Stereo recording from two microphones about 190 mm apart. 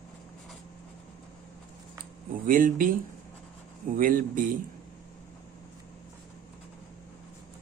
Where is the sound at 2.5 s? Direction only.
45° right (ahead or behind).